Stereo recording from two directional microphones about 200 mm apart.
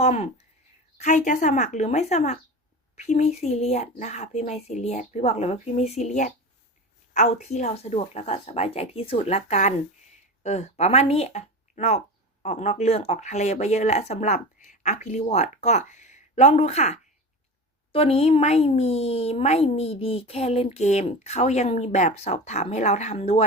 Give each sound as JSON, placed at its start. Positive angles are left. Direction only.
{"t": 0.0, "sound": "a woman's voice", "side_deg": 30}